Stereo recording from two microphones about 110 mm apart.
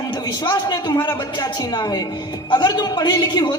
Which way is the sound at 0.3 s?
40° left (ahead or behind).